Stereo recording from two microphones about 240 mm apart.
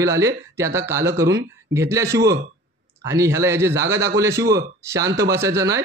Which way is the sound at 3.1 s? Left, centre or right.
Centre.